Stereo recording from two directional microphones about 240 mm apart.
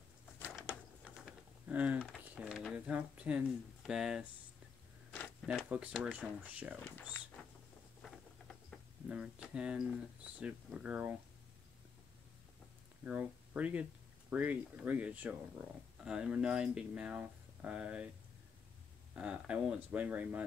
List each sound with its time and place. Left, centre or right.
0.4 s typing: centre
5.1 s speech: centre
8.0 s a sound: centre
10.4 s speech: centre
13.0 s speech: centre
19.1 s speech: centre